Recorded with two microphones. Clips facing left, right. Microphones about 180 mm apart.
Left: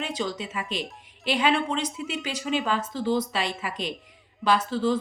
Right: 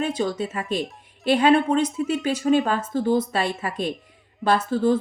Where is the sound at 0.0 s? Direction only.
50° right (ahead or behind).